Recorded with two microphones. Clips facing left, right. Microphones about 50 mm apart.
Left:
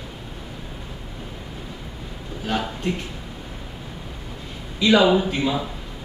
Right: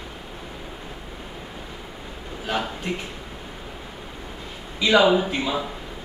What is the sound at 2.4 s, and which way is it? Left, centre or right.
Speech, centre.